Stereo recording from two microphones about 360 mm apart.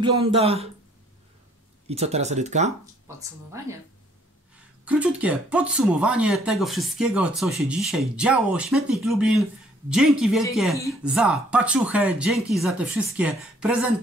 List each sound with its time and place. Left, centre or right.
0.0 s speech: centre
1.9 s speech: centre
4.8 s speech: centre